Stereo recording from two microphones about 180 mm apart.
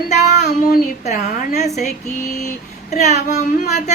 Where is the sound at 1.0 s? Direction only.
45° left (ahead or behind).